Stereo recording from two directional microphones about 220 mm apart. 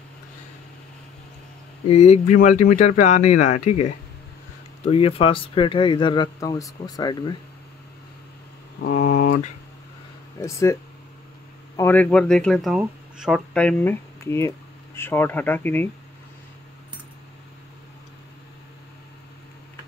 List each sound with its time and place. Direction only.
1.9 s speech: 30° left (ahead or behind)
8.8 s speech: 35° left (ahead or behind)
10.4 s speech: 15° left (ahead or behind)